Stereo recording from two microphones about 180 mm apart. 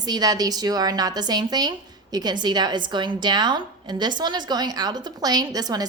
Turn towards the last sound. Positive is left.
turn(degrees=-20)  # may be behind; listen again after turning